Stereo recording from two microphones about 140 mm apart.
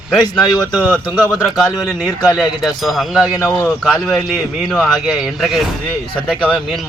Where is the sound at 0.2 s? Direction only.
30° left (ahead or behind).